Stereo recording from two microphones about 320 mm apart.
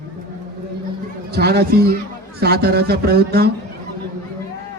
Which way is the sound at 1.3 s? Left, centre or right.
Right.